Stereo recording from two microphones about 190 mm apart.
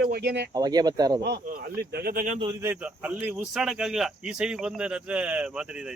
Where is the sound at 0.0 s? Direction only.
60° right (ahead or behind).